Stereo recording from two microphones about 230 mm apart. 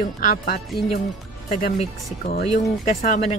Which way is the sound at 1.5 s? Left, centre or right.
Left.